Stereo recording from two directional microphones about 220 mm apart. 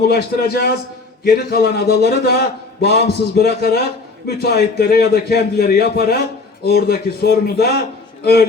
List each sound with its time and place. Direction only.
0.0 s a man's voice: 45° left (ahead or behind)